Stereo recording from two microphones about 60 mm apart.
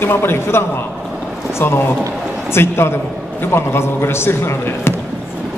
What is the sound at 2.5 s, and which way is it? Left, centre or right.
Speech, left.